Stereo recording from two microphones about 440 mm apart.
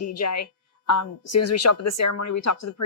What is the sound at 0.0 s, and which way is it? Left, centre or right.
A woman's voice, left.